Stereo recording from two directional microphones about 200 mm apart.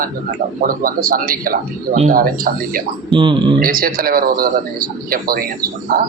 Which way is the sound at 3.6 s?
45° right (ahead or behind).